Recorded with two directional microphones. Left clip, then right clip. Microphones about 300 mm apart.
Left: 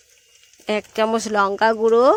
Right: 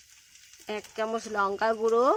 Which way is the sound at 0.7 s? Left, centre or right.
Left.